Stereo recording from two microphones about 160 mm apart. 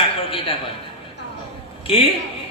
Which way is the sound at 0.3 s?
35° left (ahead or behind).